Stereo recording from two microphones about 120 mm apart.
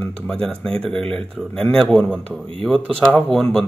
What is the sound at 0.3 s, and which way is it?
A man's voice, 5° left (ahead or behind).